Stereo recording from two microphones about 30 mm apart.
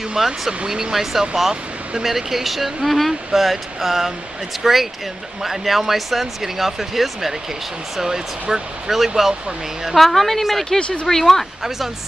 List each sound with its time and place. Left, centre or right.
0.2 s speech: centre
8.0 s speech: centre
8.9 s speech: centre
9.9 s speech: centre